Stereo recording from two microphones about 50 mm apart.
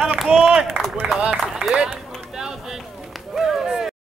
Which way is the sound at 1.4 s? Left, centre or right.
Centre.